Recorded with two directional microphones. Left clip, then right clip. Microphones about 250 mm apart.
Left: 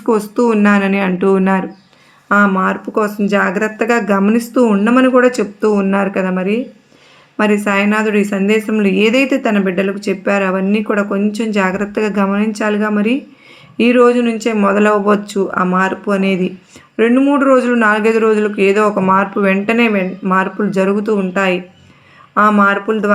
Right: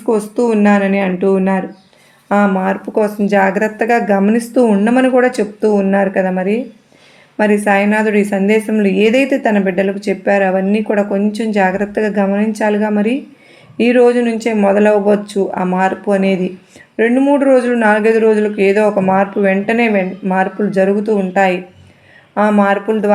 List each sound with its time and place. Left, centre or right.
0.1 s speech: left
2.3 s a woman's voice: centre